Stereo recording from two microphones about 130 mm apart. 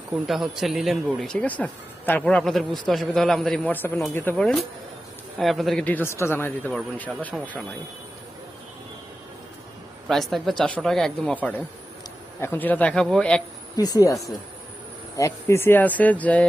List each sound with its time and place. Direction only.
0.3 s speech: centre (ahead or behind)
5.8 s speech: 15° left (ahead or behind)
7.3 s speech: 5° right (ahead or behind)
10.1 s speech: centre (ahead or behind)
13.7 s speech: 30° left (ahead or behind); by 16.5 s 10° left (ahead or behind)